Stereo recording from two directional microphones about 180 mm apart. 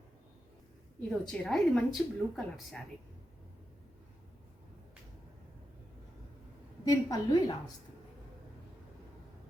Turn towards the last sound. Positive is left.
turn(degrees=20)  # may be behind; listen again after turning